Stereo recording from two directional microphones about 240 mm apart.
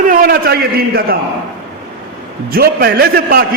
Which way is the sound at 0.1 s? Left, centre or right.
Right.